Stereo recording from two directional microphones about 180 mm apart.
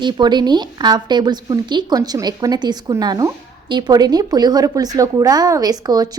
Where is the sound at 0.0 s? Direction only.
25° right (ahead or behind).